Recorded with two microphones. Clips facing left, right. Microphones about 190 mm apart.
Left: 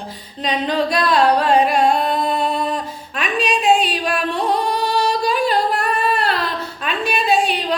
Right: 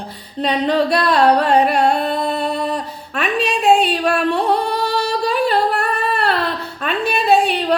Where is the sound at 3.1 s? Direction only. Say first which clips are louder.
Right 1 dB; 60° right (ahead or behind).